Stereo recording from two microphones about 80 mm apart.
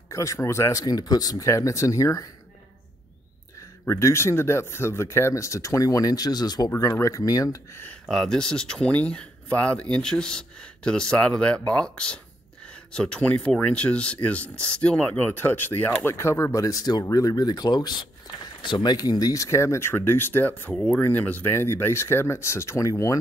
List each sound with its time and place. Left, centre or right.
0.1 s speech: left
3.9 s speech: left
6.9 s speech: left
8.1 s speech: centre
15.2 s speech: left